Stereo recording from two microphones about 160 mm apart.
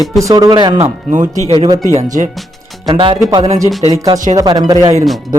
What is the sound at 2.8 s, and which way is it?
Speech, 35° right (ahead or behind).